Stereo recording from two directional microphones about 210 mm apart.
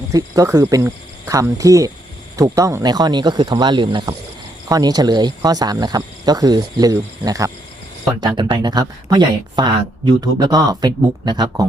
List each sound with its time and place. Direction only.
0.1 s speech: 15° right (ahead or behind)